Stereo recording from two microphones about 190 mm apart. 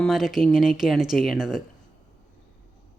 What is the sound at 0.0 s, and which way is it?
A woman's voice, centre (ahead or behind).